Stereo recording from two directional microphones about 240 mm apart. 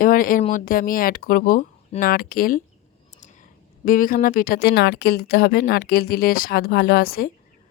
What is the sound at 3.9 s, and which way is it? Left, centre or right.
Speech, left.